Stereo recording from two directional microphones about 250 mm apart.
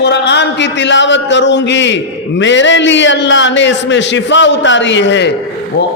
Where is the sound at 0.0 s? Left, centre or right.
Left.